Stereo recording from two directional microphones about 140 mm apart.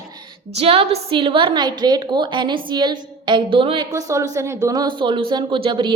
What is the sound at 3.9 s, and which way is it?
Speech, 20° right (ahead or behind).